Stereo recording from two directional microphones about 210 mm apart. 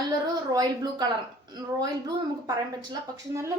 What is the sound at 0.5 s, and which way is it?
Speech, 20° right (ahead or behind).